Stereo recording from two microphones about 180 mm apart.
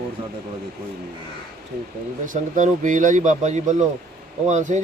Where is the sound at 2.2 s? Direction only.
45° right (ahead or behind).